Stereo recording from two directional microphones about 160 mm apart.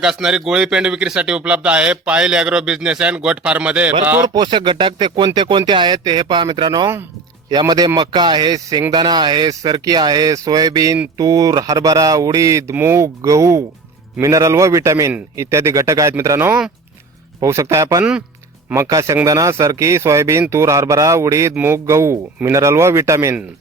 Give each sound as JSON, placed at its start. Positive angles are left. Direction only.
{"t": 0.0, "sound": "speech", "side_deg": -5}
{"t": 4.4, "sound": "speech", "side_deg": -30}
{"t": 17.4, "sound": "speech", "side_deg": -20}